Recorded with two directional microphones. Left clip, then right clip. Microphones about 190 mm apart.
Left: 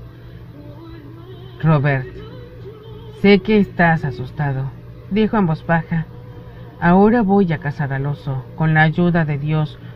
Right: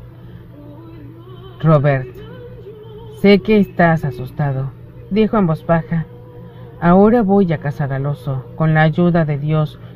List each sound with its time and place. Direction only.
1.6 s speech: 30° right (ahead or behind)
3.2 s speech: 30° right (ahead or behind)